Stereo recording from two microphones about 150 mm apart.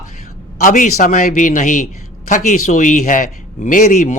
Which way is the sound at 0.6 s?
60° left (ahead or behind).